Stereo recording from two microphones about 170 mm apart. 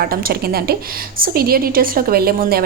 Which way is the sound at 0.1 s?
60° right (ahead or behind).